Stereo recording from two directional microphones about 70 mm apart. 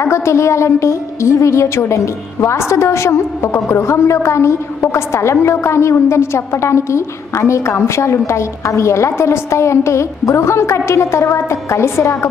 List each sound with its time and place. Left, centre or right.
0.0 s a woman's voice: left